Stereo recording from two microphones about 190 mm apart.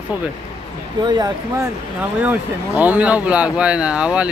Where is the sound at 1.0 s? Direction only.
20° right (ahead or behind).